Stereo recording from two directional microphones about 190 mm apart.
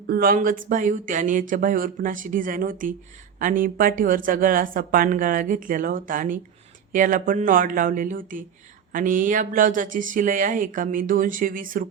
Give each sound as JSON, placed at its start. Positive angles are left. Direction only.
{"t": 0.1, "sound": "speech", "side_deg": -50}